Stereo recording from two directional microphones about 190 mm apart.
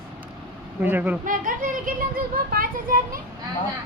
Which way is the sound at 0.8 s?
10° right (ahead or behind).